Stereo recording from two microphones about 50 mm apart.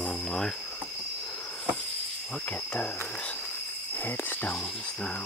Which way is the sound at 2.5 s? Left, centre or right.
Left.